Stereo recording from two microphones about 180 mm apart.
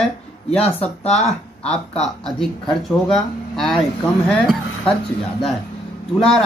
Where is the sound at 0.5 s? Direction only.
5° left (ahead or behind).